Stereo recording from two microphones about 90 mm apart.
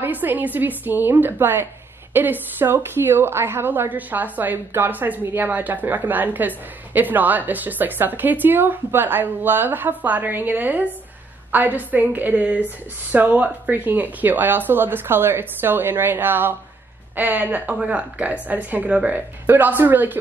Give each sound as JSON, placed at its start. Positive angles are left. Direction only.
{"t": 0.0, "sound": "a woman's voice", "side_deg": -20}